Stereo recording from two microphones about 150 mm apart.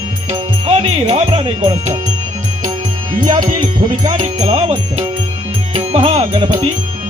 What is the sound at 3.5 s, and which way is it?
Music, 30° right (ahead or behind).